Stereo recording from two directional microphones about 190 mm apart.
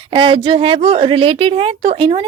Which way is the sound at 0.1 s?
25° right (ahead or behind).